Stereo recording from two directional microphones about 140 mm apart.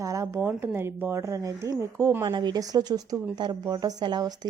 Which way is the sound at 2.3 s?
30° right (ahead or behind).